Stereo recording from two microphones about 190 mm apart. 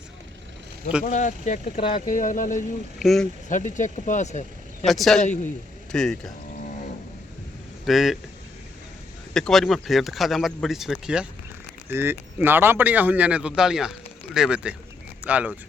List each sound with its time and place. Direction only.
1.0 s speech: 40° left (ahead or behind)
2.0 s speech: 45° left (ahead or behind)
3.0 s speech: centre (ahead or behind)
3.5 s speech: 40° left (ahead or behind)
4.9 s speech: centre (ahead or behind)
7.9 s speech: centre (ahead or behind)
9.3 s speech: centre (ahead or behind)